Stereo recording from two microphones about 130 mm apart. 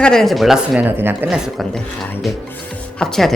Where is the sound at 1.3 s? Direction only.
Centre (ahead or behind).